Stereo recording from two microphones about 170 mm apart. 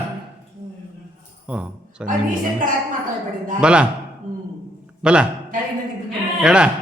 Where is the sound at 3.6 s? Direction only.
5° right (ahead or behind).